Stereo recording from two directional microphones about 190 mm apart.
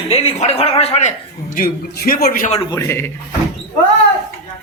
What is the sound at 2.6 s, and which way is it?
Speech, 15° left (ahead or behind).